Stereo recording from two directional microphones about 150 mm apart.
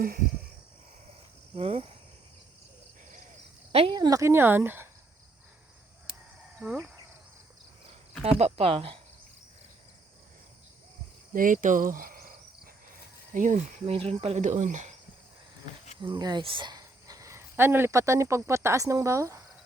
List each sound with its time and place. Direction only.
1.5 s speech: 40° right (ahead or behind)
3.7 s speech: 40° right (ahead or behind)
3.9 s speech: 25° right (ahead or behind)
6.6 s speech: 10° right (ahead or behind)
8.2 s speech: 45° right (ahead or behind)
11.3 s speech: 60° right (ahead or behind)
13.3 s speech: 60° right (ahead or behind)
13.9 s speech: 40° right (ahead or behind)
16.0 s speech: 30° right (ahead or behind)